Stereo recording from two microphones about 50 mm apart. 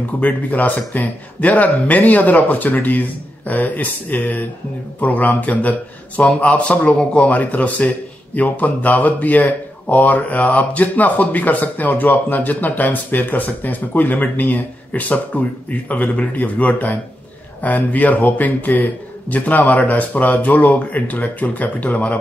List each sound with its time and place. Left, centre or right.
0.2 s speech: left
7.2 s speech: left